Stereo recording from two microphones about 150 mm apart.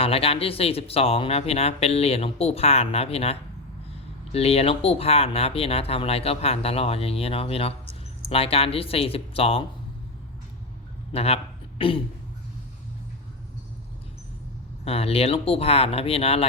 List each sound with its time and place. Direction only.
0.0 s speech: 40° left (ahead or behind)
11.1 s a man's voice: 40° left (ahead or behind)
14.8 s speech: 40° left (ahead or behind)